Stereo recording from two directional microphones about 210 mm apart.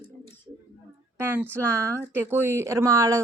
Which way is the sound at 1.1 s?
10° right (ahead or behind).